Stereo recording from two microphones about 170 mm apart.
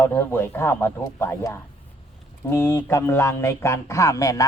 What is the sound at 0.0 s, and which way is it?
Speech, 15° left (ahead or behind).